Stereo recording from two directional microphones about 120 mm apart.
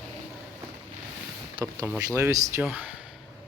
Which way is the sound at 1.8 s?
15° right (ahead or behind).